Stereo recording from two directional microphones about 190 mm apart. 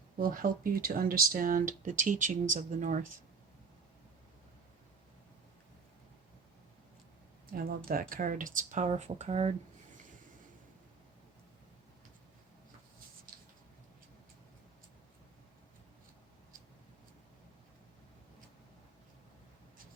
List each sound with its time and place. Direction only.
0.2 s speech: 45° right (ahead or behind)
7.5 s speech: 50° right (ahead or behind)